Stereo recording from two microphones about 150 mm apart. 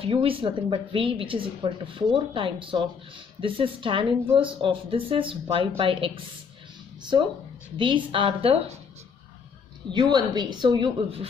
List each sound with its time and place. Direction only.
0.0 s a woman's voice: 40° right (ahead or behind)
9.9 s a woman's voice: 30° right (ahead or behind)